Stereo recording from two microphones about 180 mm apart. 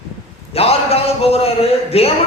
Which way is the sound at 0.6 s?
35° left (ahead or behind).